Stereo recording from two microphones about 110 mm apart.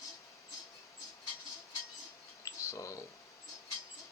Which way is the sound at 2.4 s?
30° left (ahead or behind).